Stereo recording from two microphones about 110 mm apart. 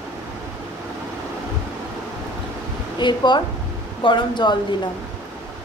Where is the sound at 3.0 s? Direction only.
45° left (ahead or behind).